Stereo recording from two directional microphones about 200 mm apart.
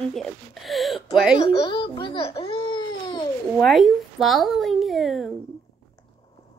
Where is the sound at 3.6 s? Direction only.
Centre (ahead or behind).